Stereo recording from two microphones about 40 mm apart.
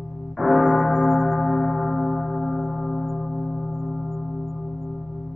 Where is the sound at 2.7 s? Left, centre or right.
Left.